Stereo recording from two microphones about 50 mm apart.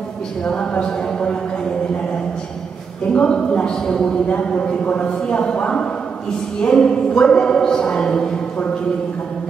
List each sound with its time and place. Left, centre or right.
0.5 s speech: centre
3.1 s speech: centre